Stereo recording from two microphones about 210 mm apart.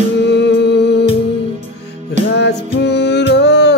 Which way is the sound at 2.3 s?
55° left (ahead or behind).